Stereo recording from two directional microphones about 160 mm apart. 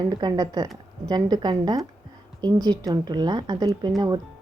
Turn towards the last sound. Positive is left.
turn(degrees=-25)  # may be behind; listen again after turning